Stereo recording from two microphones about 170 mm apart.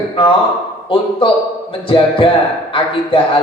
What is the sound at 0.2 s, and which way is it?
A man's voice, 30° left (ahead or behind).